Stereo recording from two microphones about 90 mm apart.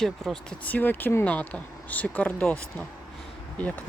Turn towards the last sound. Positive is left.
turn(degrees=15)  # may be behind; listen again after turning